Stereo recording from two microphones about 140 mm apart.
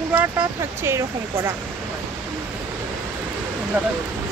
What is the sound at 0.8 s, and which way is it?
Speech, 15° right (ahead or behind).